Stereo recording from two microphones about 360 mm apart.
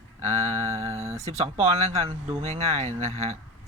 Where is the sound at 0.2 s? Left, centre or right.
Centre.